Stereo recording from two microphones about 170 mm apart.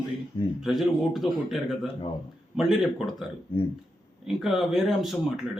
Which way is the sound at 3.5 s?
30° left (ahead or behind).